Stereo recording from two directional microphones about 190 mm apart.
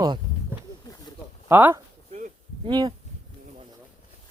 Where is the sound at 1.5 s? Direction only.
10° right (ahead or behind).